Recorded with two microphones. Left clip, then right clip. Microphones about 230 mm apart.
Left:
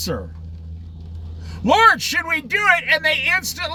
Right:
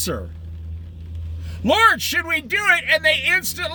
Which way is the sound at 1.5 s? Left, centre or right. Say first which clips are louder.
Left 2 dB; centre.